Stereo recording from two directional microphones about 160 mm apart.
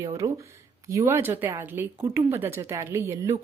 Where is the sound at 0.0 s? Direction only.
20° right (ahead or behind).